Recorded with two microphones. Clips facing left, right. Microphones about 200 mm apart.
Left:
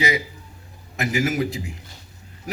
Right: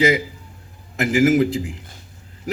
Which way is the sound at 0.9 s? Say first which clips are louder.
Right 7 dB; 50° right (ahead or behind).